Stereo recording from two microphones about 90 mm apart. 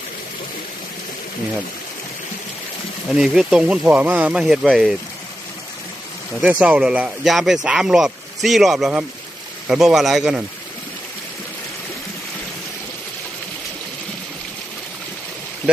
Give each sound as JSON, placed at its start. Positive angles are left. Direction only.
{"t": 3.1, "sound": "speech", "side_deg": -5}
{"t": 3.8, "sound": "speech", "side_deg": -15}
{"t": 4.4, "sound": "speech", "side_deg": -5}
{"t": 6.4, "sound": "speech", "side_deg": -15}
{"t": 7.3, "sound": "speech", "side_deg": 0}